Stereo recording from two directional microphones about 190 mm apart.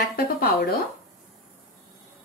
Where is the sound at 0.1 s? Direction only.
55° left (ahead or behind).